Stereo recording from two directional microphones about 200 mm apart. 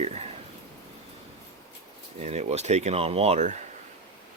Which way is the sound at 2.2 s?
35° right (ahead or behind).